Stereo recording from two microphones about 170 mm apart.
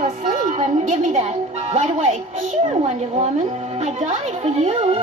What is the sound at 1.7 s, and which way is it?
Speech, 40° right (ahead or behind).